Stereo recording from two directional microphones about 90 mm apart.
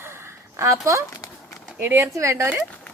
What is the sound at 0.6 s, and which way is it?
Speech, 30° right (ahead or behind).